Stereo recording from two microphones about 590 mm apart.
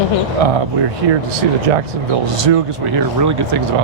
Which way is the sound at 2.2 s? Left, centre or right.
Right.